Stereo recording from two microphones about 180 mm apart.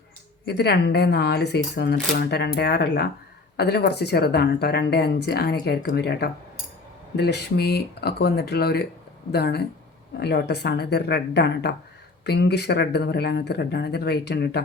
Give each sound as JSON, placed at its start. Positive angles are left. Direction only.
{"t": 0.4, "sound": "speech", "side_deg": 65}